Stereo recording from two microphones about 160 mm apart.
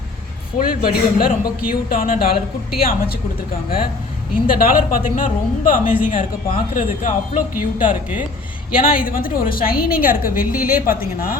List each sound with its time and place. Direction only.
0.6 s a woman's voice: 65° left (ahead or behind)
4.4 s a woman's voice: 60° left (ahead or behind)
8.7 s a woman's voice: 60° left (ahead or behind)